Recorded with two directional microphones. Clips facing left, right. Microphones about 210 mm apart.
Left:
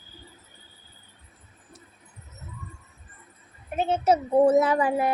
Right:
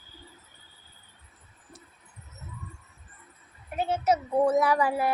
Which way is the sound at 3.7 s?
25° left (ahead or behind).